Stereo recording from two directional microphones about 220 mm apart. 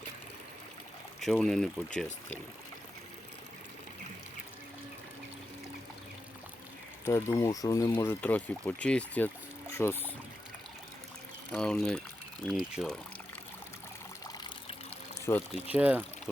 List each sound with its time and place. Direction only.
1.2 s speech: centre (ahead or behind)
7.0 s speech: 10° left (ahead or behind)
11.5 s speech: 5° left (ahead or behind)
14.3 s trickle: 20° left (ahead or behind)
15.3 s speech: 10° left (ahead or behind)
15.6 s speech: 5° right (ahead or behind)